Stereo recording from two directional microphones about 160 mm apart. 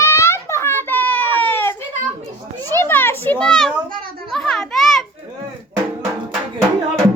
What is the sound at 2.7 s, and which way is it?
A child's voice, 15° left (ahead or behind).